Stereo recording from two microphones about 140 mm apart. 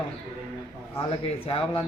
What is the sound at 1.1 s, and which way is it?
Speech, 40° left (ahead or behind).